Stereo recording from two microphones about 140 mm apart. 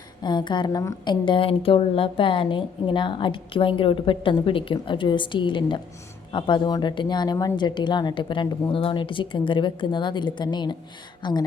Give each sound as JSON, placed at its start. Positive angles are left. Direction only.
{"t": 0.2, "sound": "a woman's voice", "side_deg": 30}